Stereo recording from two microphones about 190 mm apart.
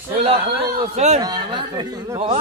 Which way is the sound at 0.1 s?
30° right (ahead or behind).